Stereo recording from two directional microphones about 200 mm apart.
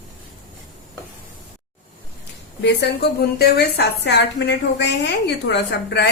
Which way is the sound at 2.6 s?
60° left (ahead or behind).